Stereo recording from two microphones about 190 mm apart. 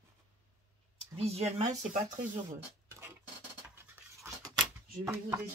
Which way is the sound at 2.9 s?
15° right (ahead or behind).